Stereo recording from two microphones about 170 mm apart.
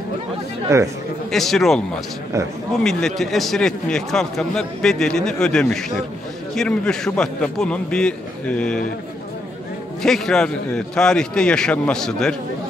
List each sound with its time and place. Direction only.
0.7 s speech: 20° right (ahead or behind)
1.3 s a man's voice: centre (ahead or behind)
2.8 s a man's voice: 5° left (ahead or behind)
10.0 s a man's voice: 5° left (ahead or behind)